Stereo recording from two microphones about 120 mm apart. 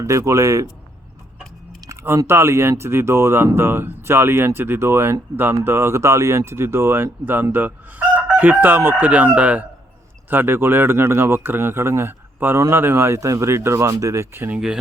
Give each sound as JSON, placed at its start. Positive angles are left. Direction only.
{"t": 0.0, "sound": "speech", "side_deg": -25}
{"t": 1.9, "sound": "speech", "side_deg": -25}